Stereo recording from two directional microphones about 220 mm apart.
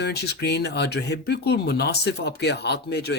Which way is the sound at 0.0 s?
50° left (ahead or behind).